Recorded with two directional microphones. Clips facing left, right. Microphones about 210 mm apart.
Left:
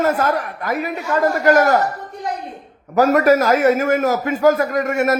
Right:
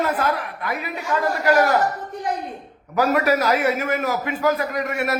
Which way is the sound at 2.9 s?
45° left (ahead or behind).